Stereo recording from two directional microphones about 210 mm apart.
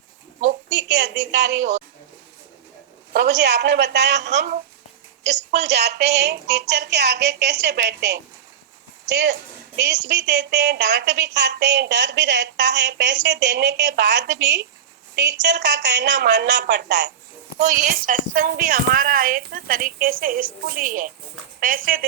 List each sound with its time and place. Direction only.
0.7 s a woman's voice: 55° right (ahead or behind)
3.1 s a woman's voice: 50° right (ahead or behind)
5.6 s a woman's voice: 50° right (ahead or behind)
17.6 s a woman's voice: 40° right (ahead or behind)